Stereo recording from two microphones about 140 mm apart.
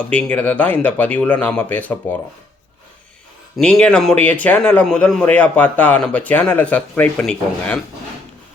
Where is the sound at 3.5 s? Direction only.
5° left (ahead or behind).